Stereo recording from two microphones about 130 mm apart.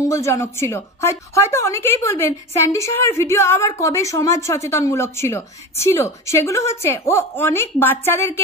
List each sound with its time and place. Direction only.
0.0 s a woman's voice: 25° left (ahead or behind)